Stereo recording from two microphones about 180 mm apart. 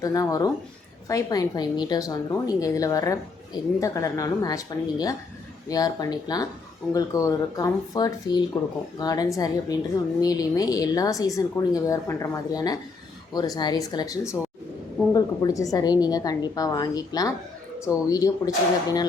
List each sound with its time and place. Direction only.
0.0 s a woman's voice: 20° left (ahead or behind)